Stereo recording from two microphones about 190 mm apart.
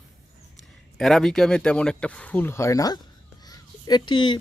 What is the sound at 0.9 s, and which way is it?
Speech, centre (ahead or behind).